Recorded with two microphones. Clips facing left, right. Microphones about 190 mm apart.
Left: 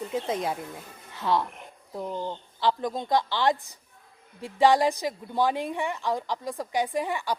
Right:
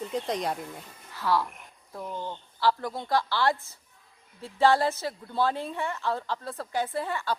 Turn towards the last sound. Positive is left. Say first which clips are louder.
# left 2 dB
turn(degrees=15)  # may be behind; listen again after turning